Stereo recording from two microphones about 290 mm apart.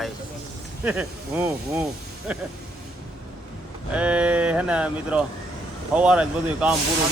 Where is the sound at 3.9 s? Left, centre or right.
Centre.